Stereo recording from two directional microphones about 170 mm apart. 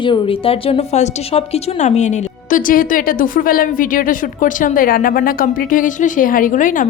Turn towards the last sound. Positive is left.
turn(degrees=50)  # may be behind; listen again after turning